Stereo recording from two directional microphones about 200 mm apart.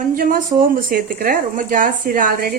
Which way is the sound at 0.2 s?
45° right (ahead or behind).